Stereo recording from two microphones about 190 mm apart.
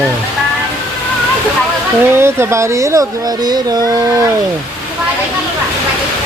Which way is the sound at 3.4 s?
20° right (ahead or behind).